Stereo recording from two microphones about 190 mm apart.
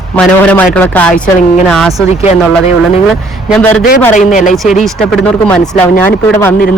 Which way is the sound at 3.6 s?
5° left (ahead or behind).